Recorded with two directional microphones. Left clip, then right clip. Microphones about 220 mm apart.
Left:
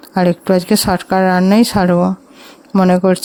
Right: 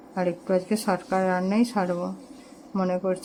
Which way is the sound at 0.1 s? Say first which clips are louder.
Left 11 dB; 50° left (ahead or behind).